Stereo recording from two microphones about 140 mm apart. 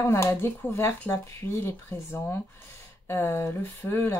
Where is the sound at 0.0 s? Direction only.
20° left (ahead or behind).